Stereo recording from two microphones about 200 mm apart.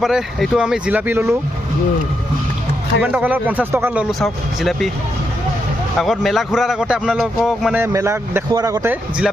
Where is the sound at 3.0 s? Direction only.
5° right (ahead or behind).